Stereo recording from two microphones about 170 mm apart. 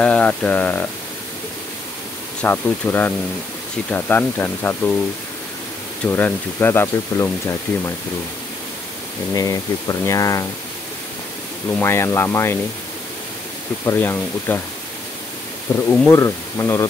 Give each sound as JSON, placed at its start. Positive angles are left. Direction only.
{"t": 0.0, "sound": "speech", "side_deg": 10}
{"t": 2.4, "sound": "speech", "side_deg": 10}
{"t": 6.0, "sound": "speech", "side_deg": 10}
{"t": 9.3, "sound": "speech", "side_deg": 20}
{"t": 11.8, "sound": "speech", "side_deg": 15}
{"t": 13.8, "sound": "speech", "side_deg": 10}
{"t": 15.9, "sound": "speech", "side_deg": 10}